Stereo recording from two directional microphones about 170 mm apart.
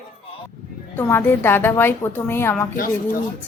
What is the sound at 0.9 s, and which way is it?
A woman's voice, 10° left (ahead or behind).